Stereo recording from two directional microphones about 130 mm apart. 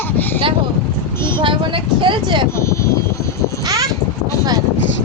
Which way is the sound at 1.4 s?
40° right (ahead or behind).